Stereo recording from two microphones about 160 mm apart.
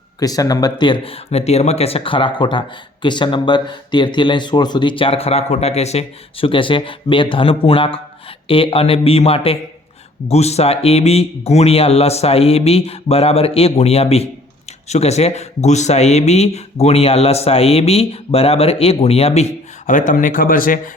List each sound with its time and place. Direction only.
0.2 s speech: 20° left (ahead or behind); by 19.5 s 40° left (ahead or behind)
19.9 s speech: 55° left (ahead or behind)